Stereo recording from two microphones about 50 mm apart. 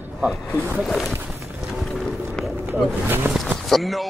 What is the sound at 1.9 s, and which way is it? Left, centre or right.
Boat, centre.